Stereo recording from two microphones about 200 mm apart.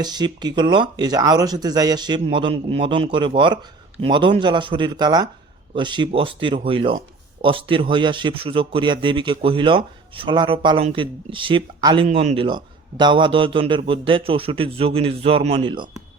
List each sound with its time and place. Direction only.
0.0 s speech: 20° right (ahead or behind)